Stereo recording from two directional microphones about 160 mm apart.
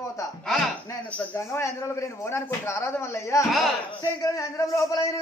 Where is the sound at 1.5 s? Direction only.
20° left (ahead or behind).